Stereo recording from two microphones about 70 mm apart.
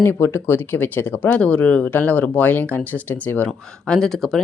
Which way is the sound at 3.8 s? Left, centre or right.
Centre.